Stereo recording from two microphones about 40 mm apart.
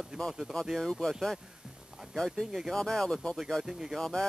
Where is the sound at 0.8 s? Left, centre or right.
Centre.